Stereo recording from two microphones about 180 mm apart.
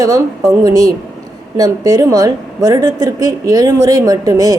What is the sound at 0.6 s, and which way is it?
A woman's voice, 20° right (ahead or behind).